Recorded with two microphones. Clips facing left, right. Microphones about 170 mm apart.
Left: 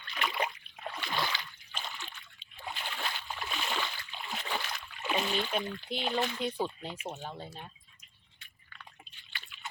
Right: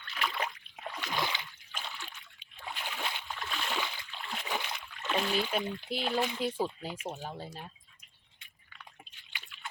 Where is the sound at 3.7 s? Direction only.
10° right (ahead or behind).